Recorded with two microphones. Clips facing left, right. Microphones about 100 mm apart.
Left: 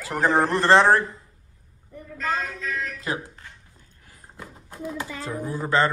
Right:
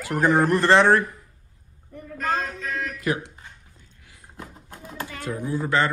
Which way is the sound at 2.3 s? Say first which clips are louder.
Right 1 dB; 30° right (ahead or behind).